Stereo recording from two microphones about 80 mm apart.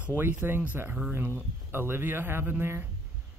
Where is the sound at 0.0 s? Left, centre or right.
Right.